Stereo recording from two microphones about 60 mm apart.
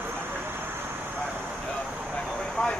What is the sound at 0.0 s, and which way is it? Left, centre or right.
Vehicle, right.